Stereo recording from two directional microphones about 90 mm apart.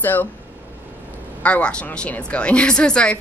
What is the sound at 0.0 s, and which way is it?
Speech, 20° left (ahead or behind).